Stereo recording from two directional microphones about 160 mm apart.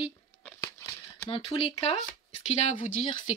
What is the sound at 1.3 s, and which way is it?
Speech, 30° left (ahead or behind).